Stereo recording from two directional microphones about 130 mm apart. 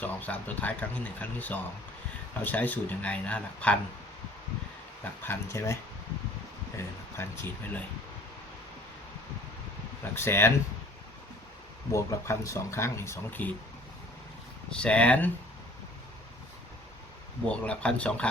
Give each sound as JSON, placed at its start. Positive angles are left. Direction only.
{"t": 0.0, "sound": "speech", "side_deg": 10}
{"t": 5.2, "sound": "speech", "side_deg": 20}
{"t": 7.2, "sound": "speech", "side_deg": 15}
{"t": 10.0, "sound": "speech", "side_deg": 20}
{"t": 11.9, "sound": "speech", "side_deg": 20}
{"t": 14.7, "sound": "speech", "side_deg": 10}
{"t": 17.5, "sound": "speech", "side_deg": 10}